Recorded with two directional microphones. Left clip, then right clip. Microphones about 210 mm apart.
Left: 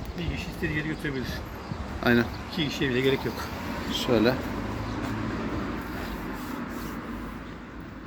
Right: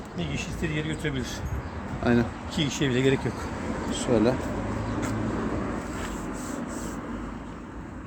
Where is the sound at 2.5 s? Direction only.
45° right (ahead or behind).